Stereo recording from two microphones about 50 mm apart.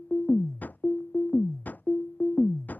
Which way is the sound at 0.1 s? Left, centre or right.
Left.